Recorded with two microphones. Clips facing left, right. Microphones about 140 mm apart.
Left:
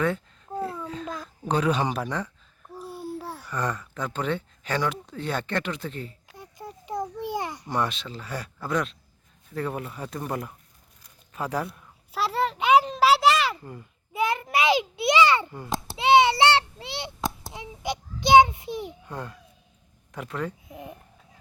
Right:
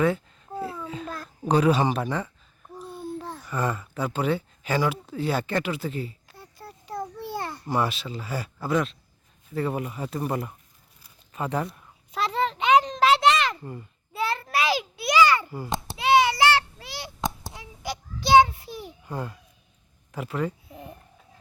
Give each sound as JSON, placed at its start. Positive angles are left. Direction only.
{"t": 0.0, "sound": "babbling", "side_deg": -5}
{"t": 1.5, "sound": "speech", "side_deg": -10}
{"t": 2.8, "sound": "babbling", "side_deg": 10}
{"t": 3.4, "sound": "speech", "side_deg": -5}
{"t": 6.2, "sound": "babbling", "side_deg": 15}
{"t": 7.7, "sound": "a child's voice", "side_deg": -5}
{"t": 14.1, "sound": "a child's voice", "side_deg": 15}
{"t": 15.4, "sound": "speech", "side_deg": -5}
{"t": 16.0, "sound": "a child's voice", "side_deg": 25}
{"t": 17.2, "sound": "a sound", "side_deg": 0}
{"t": 17.5, "sound": "child singing", "side_deg": 20}
{"t": 19.0, "sound": "speech", "side_deg": -5}
{"t": 20.7, "sound": "speech", "side_deg": 15}